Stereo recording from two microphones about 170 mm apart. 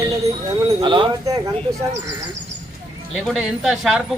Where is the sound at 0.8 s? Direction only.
30° right (ahead or behind).